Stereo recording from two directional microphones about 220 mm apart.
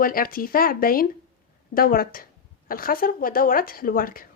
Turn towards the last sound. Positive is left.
turn(degrees=40)  # may be behind; listen again after turning